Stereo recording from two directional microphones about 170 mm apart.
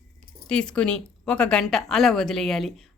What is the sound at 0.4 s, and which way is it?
Speech, 5° left (ahead or behind).